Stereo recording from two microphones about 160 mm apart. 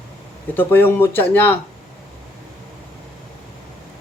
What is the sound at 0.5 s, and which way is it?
Speech, 15° left (ahead or behind).